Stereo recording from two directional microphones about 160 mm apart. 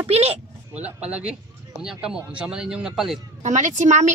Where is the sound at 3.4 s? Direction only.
50° right (ahead or behind).